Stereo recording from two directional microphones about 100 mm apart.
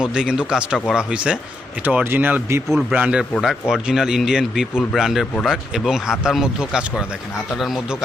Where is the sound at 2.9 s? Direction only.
10° right (ahead or behind).